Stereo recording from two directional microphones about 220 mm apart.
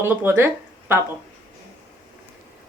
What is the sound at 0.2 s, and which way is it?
Speech, 10° right (ahead or behind).